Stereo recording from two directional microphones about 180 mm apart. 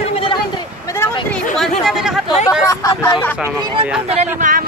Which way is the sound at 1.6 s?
Centre (ahead or behind).